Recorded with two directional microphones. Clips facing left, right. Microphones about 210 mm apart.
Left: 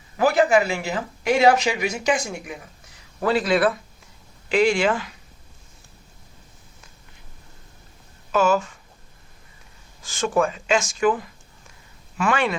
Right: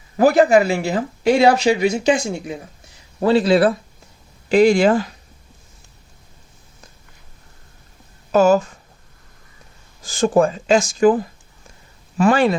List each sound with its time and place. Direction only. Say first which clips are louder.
0.2 s speech: right 5 dB; 35° right (ahead or behind)
8.3 s speech: right 6 dB; 40° right (ahead or behind)
10.0 s speech: right 6 dB; 35° right (ahead or behind)